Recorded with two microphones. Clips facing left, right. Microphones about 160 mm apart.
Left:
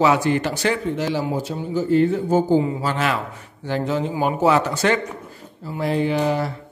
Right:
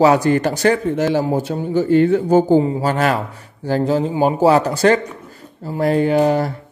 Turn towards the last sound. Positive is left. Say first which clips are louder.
# right 5 dB
turn(degrees=-45)  # may be behind; listen again after turning